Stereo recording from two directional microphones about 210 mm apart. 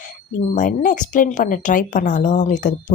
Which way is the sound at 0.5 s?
40° left (ahead or behind).